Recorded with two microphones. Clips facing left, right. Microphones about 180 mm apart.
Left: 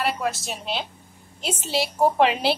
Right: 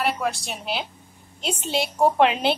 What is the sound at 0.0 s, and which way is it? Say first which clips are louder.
A woman's voice: right 1 dB; centre (ahead or behind).